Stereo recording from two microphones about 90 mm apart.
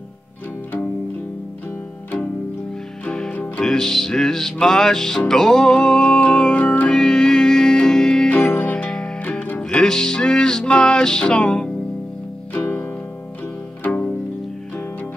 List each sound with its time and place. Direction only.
3.1 s music: 10° left (ahead or behind)
8.3 s music: 20° left (ahead or behind)
12.5 s harp: 20° left (ahead or behind)
13.8 s pizzicato: 20° left (ahead or behind)